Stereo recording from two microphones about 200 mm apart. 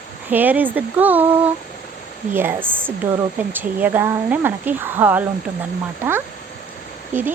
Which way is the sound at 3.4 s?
10° right (ahead or behind).